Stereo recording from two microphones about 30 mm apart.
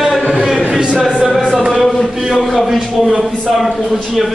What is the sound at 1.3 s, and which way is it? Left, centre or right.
Music, centre.